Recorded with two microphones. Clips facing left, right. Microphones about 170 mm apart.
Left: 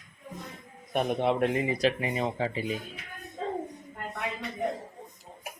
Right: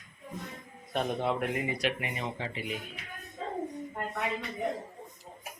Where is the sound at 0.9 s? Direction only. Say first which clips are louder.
Left 4 dB; 20° left (ahead or behind).